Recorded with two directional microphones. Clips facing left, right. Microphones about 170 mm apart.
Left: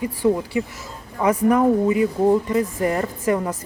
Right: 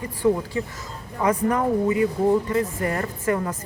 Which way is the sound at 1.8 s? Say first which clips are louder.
Left 2 dB; 20° left (ahead or behind).